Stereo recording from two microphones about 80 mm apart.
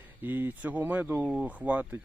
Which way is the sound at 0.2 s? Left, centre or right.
Right.